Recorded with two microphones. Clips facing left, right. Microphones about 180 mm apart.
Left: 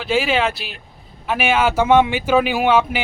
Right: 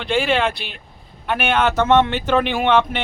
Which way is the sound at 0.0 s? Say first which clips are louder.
Even; 5° left (ahead or behind).